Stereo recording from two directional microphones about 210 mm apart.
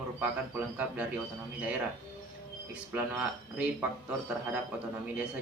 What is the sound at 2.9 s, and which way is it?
Speech, 5° right (ahead or behind).